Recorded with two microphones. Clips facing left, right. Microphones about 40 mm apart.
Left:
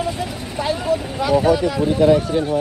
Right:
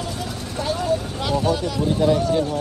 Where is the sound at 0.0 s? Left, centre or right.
Left.